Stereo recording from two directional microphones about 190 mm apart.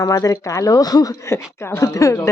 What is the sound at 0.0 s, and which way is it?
Speech, 20° left (ahead or behind).